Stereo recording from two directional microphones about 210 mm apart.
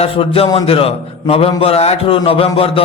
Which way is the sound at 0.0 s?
25° left (ahead or behind).